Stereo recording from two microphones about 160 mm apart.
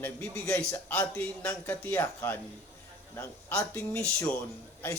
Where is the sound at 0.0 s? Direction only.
10° left (ahead or behind).